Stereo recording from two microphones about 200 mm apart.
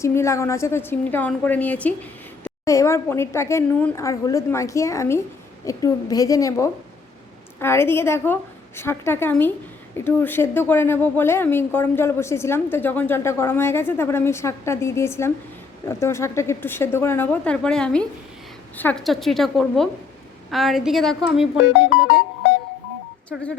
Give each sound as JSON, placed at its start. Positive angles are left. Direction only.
{"t": 0.0, "sound": "a woman's voice", "side_deg": 15}
{"t": 23.3, "sound": "a woman's voice", "side_deg": 0}